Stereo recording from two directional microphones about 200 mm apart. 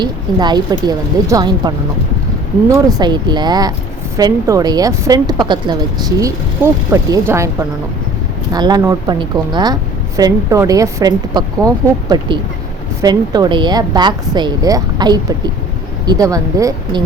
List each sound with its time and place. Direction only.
0.0 s a woman's voice: 20° right (ahead or behind)
8.5 s a woman's voice: 20° right (ahead or behind)